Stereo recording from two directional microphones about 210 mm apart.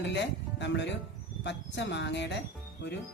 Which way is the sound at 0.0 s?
55° left (ahead or behind).